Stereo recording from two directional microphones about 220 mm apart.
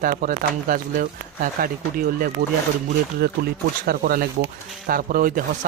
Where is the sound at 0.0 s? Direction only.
40° right (ahead or behind).